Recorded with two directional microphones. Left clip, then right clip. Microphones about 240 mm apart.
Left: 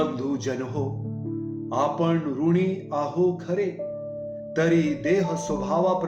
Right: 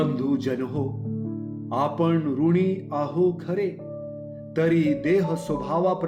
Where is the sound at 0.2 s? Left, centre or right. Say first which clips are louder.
Right 2 dB; right.